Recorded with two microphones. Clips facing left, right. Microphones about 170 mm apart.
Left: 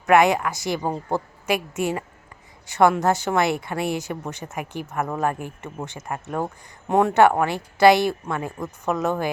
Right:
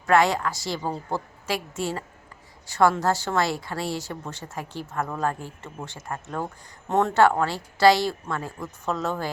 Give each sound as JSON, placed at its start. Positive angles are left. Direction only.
{"t": 0.0, "sound": "a woman's voice", "side_deg": 20}